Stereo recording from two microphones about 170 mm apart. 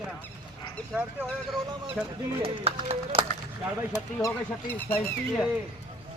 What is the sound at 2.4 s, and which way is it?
Speech, 35° right (ahead or behind).